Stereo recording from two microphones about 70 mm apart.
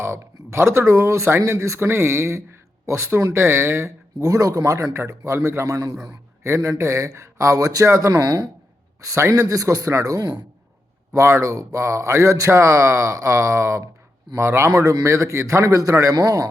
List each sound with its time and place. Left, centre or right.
0.0 s speech: right
11.1 s speech: right